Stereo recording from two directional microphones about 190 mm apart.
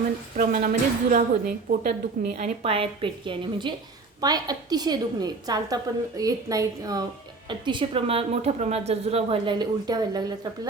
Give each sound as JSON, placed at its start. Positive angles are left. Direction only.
{"t": 0.3, "sound": "a woman's voice", "side_deg": -40}
{"t": 2.4, "sound": "a woman's voice", "side_deg": -30}